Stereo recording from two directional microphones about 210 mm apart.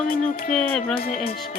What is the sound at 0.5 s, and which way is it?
Music, 5° left (ahead or behind).